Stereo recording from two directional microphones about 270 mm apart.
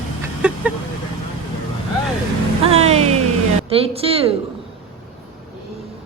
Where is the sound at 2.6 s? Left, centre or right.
Right.